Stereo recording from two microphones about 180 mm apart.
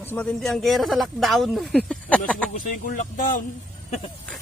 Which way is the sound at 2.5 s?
50° left (ahead or behind).